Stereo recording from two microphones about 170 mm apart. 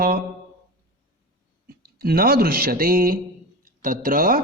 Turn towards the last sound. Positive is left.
turn(degrees=-55)  # may be behind; listen again after turning